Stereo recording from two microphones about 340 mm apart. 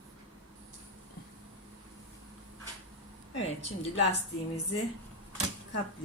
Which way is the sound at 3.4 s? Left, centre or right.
Centre.